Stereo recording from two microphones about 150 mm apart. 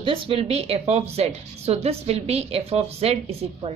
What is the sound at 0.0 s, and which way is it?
A woman's voice, 40° right (ahead or behind).